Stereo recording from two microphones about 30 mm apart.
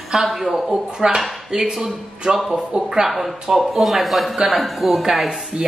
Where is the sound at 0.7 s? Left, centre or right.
Centre.